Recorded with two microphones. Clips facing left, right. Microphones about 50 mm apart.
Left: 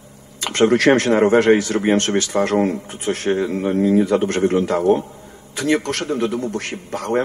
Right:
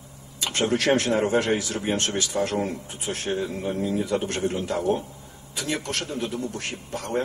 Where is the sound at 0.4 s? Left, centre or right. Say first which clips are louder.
Left 8 dB; left.